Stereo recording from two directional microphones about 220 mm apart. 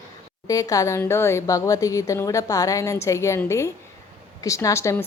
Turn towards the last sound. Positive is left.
turn(degrees=15)  # may be behind; listen again after turning